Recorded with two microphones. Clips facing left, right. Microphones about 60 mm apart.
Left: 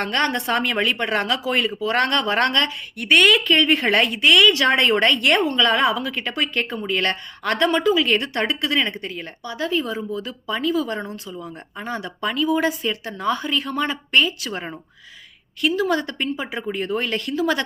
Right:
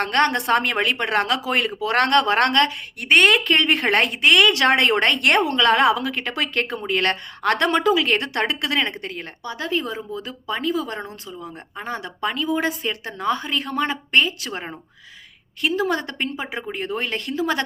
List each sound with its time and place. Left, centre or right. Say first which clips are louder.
0.0 s a woman's voice: right 2 dB; right
3.1 s a woman's voice: even; right
4.4 s a woman's voice: even; right
15.6 s a woman's voice: left 1 dB; right